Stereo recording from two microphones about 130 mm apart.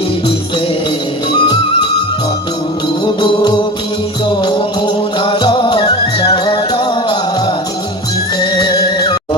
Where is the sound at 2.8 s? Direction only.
35° left (ahead or behind).